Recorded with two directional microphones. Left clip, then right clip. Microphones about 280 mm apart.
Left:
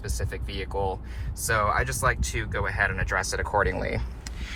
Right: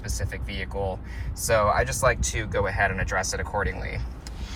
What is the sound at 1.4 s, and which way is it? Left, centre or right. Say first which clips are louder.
Speech: right 3 dB; centre.